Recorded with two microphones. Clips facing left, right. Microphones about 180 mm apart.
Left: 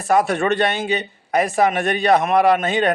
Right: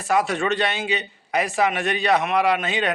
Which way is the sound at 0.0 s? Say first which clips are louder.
Left 4 dB; 50° left (ahead or behind).